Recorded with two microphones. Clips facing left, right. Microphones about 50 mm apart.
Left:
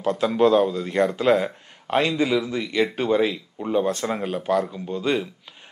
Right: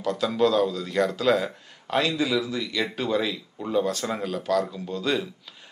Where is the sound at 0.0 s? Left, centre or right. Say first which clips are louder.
Left 4 dB; left.